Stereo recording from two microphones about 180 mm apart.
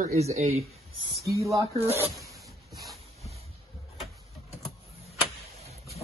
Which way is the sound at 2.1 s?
Centre (ahead or behind).